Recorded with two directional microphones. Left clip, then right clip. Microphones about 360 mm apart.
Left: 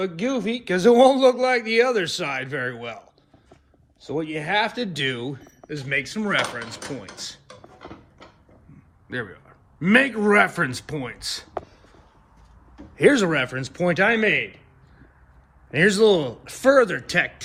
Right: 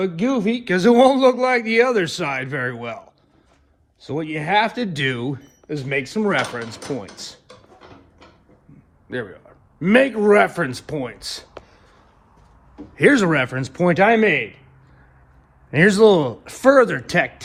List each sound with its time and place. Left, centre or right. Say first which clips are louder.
0.0 s speech: right 4 dB; centre
9.0 s speech: right 2 dB; centre
13.0 s speech: right 2 dB; centre
15.7 s speech: right 4 dB; centre